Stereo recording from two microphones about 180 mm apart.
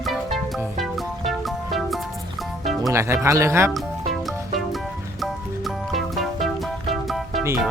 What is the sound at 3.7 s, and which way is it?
Music, centre (ahead or behind).